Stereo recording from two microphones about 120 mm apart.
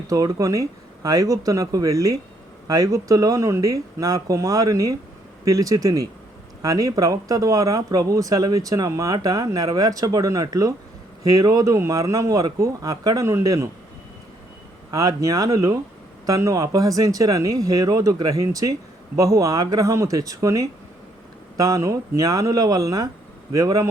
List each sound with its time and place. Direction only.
0.1 s speech: 30° right (ahead or behind)
14.8 s speech: 30° right (ahead or behind)